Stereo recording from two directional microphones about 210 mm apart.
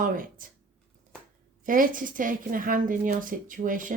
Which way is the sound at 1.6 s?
40° right (ahead or behind).